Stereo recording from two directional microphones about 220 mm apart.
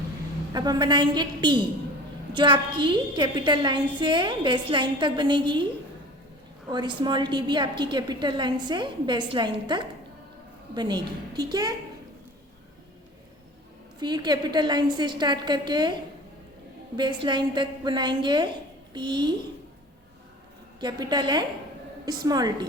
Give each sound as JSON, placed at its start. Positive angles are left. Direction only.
{"t": 0.5, "sound": "a woman's voice", "side_deg": -20}
{"t": 6.7, "sound": "a woman's voice", "side_deg": -20}
{"t": 14.0, "sound": "a woman's voice", "side_deg": -20}
{"t": 17.0, "sound": "a woman's voice", "side_deg": -20}
{"t": 20.8, "sound": "a woman's voice", "side_deg": -20}